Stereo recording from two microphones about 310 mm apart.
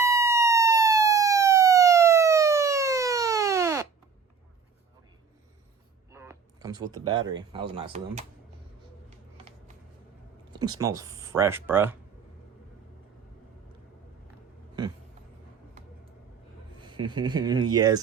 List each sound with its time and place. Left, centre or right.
0.0 s emergency vehicle: centre
6.1 s a sound: centre
7.5 s speech: centre
10.5 s a sound: centre
10.9 s speech: centre
16.8 s speech: centre